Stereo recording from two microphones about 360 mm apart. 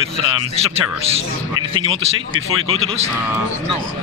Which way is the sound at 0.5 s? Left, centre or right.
Centre.